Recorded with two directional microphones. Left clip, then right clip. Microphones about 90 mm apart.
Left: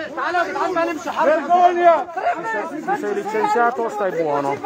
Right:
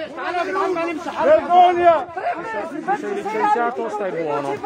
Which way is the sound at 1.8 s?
25° left (ahead or behind).